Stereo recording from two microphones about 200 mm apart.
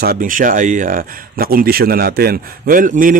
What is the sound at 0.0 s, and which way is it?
Speech, 45° right (ahead or behind).